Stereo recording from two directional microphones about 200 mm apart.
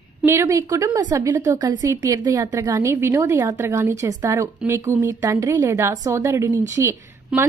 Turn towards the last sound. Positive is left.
turn(degrees=-15)  # may be behind; listen again after turning